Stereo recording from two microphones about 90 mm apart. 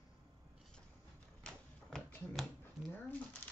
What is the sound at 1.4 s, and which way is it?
Typewriter, 5° left (ahead or behind).